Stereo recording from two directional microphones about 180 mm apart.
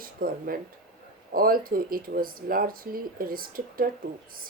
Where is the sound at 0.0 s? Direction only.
55° right (ahead or behind).